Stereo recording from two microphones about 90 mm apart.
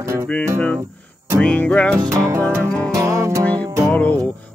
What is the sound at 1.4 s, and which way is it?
Music, 15° left (ahead or behind).